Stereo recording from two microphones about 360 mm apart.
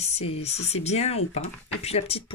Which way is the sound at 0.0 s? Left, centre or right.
Centre.